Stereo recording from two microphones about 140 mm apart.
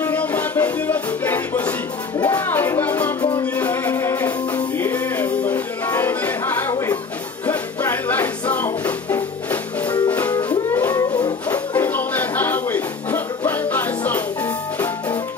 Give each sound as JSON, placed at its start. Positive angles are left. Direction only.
{"t": 0.0, "sound": "music", "side_deg": 10}
{"t": 3.2, "sound": "music", "side_deg": 30}
{"t": 3.5, "sound": "music", "side_deg": 15}